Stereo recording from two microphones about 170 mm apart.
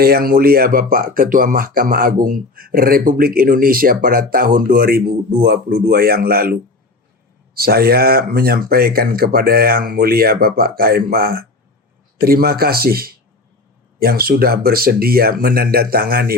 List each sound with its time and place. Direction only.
0.0 s speech: 65° right (ahead or behind)